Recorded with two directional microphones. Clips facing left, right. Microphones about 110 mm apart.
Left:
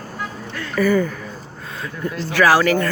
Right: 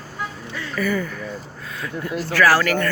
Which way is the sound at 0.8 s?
35° left (ahead or behind).